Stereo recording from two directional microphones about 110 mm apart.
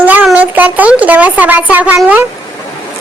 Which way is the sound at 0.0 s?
15° right (ahead or behind).